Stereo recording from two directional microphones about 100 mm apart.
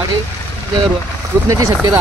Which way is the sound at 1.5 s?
35° right (ahead or behind).